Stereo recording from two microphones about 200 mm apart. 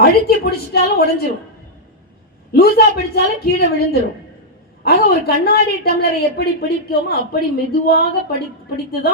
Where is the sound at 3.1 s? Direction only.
55° left (ahead or behind).